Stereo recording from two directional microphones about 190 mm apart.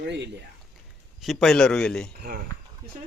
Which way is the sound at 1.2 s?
Centre (ahead or behind).